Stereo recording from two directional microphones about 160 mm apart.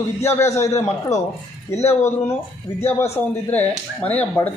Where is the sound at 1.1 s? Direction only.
45° left (ahead or behind).